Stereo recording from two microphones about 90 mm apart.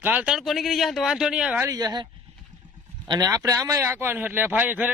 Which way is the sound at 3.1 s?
45° right (ahead or behind).